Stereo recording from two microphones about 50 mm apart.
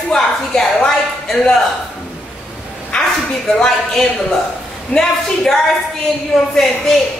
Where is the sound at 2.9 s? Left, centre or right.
Centre.